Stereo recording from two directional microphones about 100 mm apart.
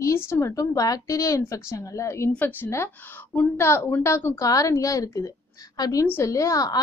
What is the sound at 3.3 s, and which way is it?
A woman's voice, 25° left (ahead or behind).